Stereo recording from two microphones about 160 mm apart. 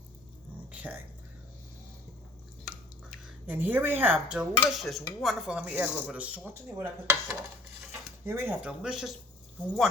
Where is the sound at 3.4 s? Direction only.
10° right (ahead or behind).